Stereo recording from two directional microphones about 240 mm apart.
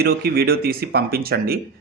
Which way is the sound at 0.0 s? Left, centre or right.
Right.